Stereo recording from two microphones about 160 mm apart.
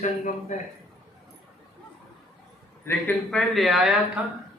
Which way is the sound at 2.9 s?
10° left (ahead or behind).